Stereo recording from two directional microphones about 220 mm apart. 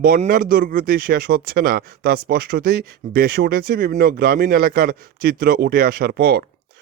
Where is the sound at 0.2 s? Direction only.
40° right (ahead or behind).